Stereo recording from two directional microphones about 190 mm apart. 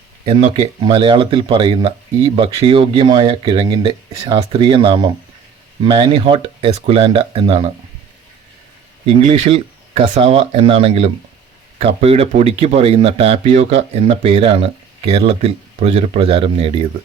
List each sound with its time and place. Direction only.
0.3 s speech: 25° right (ahead or behind)
9.0 s speech: 35° right (ahead or behind)